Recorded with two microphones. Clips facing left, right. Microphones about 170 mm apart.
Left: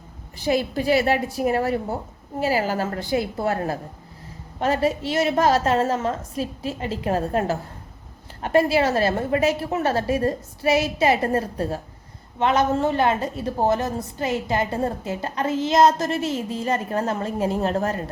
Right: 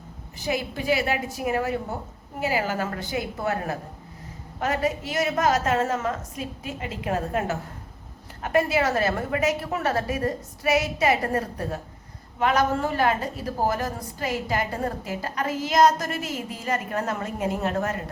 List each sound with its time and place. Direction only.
0.3 s a woman's voice: 35° left (ahead or behind)